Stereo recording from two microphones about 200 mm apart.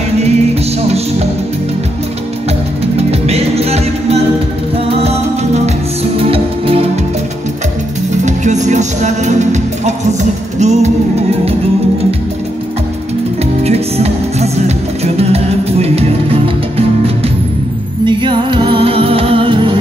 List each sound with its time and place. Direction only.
2.8 s music: 30° right (ahead or behind)
8.3 s music: 35° right (ahead or behind)
13.6 s music: 30° right (ahead or behind)
18.0 s music: 25° right (ahead or behind)